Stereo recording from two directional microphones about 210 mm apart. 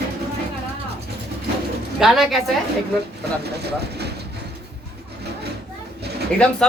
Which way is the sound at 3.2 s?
50° right (ahead or behind).